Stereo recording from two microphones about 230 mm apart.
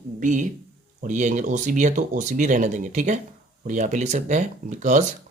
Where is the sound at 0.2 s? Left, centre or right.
Right.